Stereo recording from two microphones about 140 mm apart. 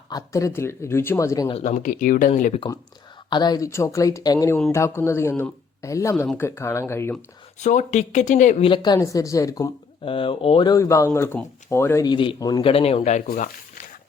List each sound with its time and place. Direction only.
0.1 s speech: 25° left (ahead or behind)
1.6 s speech: 65° left (ahead or behind)
3.2 s speech: 30° left (ahead or behind)
7.6 s speech: 60° left (ahead or behind)
8.6 s speech: 35° left (ahead or behind)
9.0 s speech: 25° left (ahead or behind)
10.0 s speech: 40° left (ahead or behind)
10.7 s speech: 20° left (ahead or behind)
12.0 s speech: 35° left (ahead or behind)
12.6 s a man's voice: 45° left (ahead or behind)
13.2 s speech: 90° left